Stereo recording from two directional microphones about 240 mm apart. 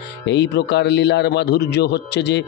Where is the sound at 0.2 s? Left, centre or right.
Left.